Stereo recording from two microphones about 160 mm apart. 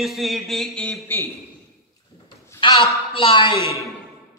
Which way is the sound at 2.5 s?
30° left (ahead or behind).